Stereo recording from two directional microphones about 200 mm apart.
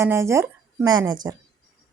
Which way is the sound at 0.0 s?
15° right (ahead or behind).